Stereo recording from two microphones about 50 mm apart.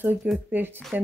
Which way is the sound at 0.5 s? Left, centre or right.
Right.